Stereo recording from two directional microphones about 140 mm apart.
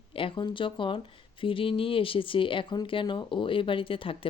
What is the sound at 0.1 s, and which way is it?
Speech, 40° left (ahead or behind).